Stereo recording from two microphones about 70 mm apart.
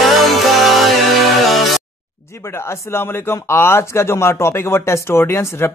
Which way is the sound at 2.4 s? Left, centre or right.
Left.